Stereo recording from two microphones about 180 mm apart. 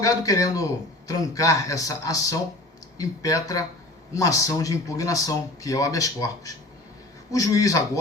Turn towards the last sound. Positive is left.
turn(degrees=20)  # may be behind; listen again after turning